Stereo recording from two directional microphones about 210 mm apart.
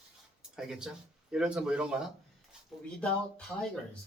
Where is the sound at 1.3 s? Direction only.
5° right (ahead or behind).